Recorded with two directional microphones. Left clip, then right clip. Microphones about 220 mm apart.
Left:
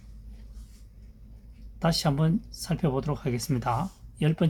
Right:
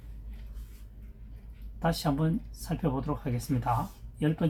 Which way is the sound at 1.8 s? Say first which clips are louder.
Left 3 dB; 55° left (ahead or behind).